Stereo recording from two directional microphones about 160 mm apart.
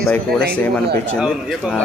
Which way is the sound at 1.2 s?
5° right (ahead or behind).